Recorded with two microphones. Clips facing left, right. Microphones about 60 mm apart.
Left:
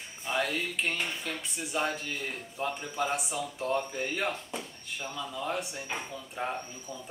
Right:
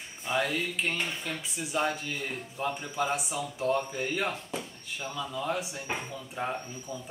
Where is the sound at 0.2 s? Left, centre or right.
Centre.